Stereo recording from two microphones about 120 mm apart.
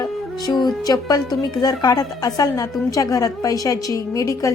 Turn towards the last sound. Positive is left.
turn(degrees=25)  # may be behind; listen again after turning